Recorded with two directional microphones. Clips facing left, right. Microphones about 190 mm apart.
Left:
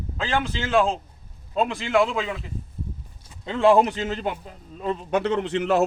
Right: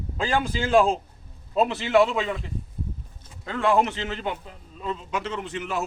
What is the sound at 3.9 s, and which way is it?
Speech, 40° left (ahead or behind).